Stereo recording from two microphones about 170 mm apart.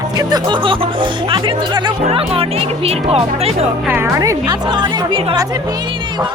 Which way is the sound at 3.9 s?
15° right (ahead or behind).